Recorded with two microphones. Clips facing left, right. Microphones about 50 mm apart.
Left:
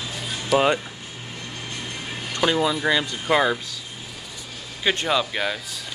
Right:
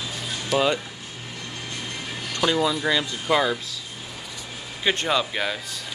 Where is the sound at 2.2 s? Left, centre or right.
Centre.